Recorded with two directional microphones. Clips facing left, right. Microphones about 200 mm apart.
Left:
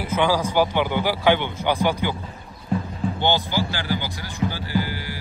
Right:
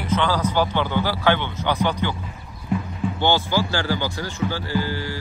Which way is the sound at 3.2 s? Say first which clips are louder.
Right 2 dB; 15° left (ahead or behind).